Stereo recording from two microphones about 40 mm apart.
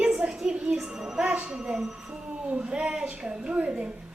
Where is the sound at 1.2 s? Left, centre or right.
Right.